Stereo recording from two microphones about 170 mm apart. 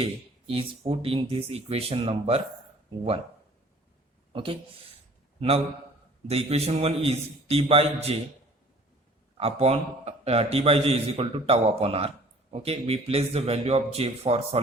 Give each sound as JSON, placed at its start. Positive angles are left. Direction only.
{"t": 0.0, "sound": "a man's voice", "side_deg": -35}
{"t": 4.3, "sound": "speech", "side_deg": -30}
{"t": 6.2, "sound": "a man's voice", "side_deg": -35}
{"t": 9.4, "sound": "a man's voice", "side_deg": -35}